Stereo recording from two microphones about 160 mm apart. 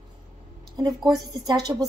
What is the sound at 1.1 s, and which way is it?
Speech, 25° right (ahead or behind).